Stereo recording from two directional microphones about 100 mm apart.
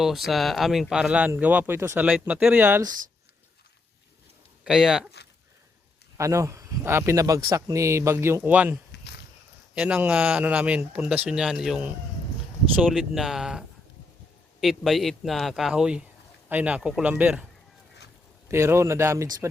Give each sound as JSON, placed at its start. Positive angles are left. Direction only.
{"t": 0.0, "sound": "a man's voice", "side_deg": 0}
{"t": 4.6, "sound": "speech", "side_deg": -5}
{"t": 6.1, "sound": "speech", "side_deg": -30}
{"t": 13.0, "sound": "a man's voice", "side_deg": -5}
{"t": 18.4, "sound": "speech", "side_deg": -30}